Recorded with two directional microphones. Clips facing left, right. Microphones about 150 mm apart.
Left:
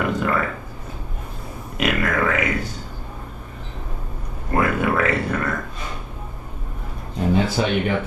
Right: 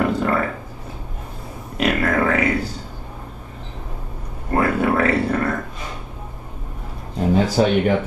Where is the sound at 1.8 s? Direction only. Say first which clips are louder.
Right 2 dB; 35° right (ahead or behind).